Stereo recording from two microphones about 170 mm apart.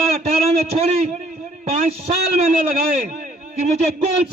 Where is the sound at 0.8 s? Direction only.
40° right (ahead or behind).